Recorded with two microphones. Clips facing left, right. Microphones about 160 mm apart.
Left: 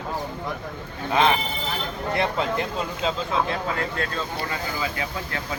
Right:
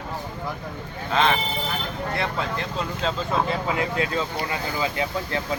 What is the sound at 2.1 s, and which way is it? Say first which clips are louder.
Speech: left 5 dB; 20° left (ahead or behind).